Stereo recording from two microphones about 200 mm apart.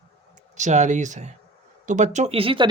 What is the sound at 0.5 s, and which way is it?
Speech, 35° right (ahead or behind).